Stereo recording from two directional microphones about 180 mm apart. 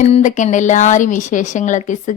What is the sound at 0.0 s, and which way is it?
Speech, 40° left (ahead or behind).